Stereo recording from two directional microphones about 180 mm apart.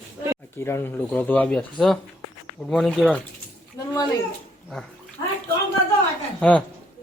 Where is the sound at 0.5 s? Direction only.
15° left (ahead or behind).